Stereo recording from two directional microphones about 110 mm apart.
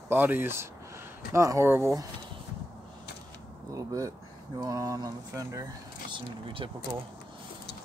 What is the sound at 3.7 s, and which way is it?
Mantra, 30° right (ahead or behind).